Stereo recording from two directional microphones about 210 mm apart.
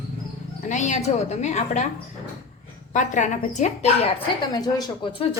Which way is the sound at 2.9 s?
35° left (ahead or behind).